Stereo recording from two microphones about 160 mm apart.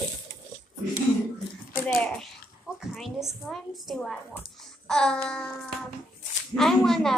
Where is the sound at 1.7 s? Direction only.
15° left (ahead or behind).